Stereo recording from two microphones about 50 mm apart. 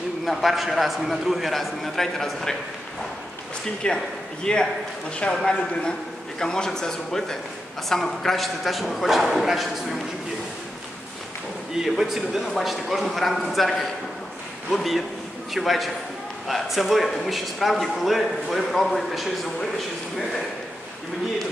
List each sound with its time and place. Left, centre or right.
0.2 s a man's voice: centre
3.8 s a man's voice: centre
11.7 s a man's voice: centre